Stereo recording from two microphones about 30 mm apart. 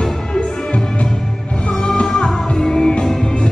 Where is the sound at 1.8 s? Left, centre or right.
Left.